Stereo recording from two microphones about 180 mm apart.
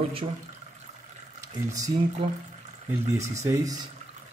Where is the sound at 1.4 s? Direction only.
20° right (ahead or behind).